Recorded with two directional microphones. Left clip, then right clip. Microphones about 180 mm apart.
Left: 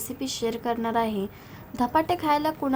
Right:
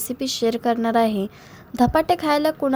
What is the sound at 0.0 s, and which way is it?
A woman's voice, 25° right (ahead or behind).